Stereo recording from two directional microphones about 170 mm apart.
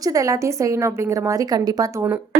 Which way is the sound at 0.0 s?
20° right (ahead or behind).